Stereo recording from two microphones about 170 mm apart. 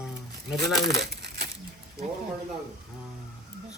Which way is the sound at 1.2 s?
65° right (ahead or behind).